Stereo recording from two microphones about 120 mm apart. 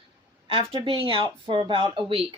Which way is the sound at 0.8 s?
45° right (ahead or behind).